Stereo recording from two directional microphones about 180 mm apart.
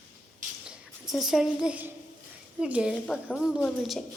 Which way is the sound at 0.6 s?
Centre (ahead or behind).